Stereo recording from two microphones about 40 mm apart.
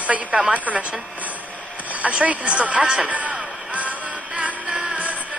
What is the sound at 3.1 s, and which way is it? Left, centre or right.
Music, right.